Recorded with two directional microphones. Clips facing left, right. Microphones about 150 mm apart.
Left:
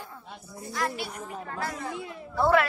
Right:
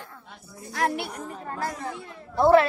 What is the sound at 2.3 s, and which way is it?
Speech, 25° right (ahead or behind).